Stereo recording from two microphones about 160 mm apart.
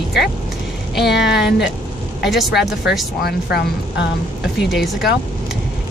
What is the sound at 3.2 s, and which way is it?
Speech, 90° left.